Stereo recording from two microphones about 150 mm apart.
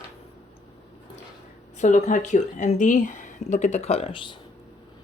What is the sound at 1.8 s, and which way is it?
Speech, 50° left (ahead or behind).